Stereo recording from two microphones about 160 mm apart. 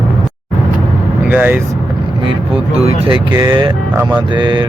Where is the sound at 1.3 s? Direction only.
10° right (ahead or behind).